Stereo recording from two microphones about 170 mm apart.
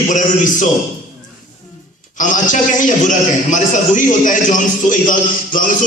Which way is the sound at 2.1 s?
50° left (ahead or behind).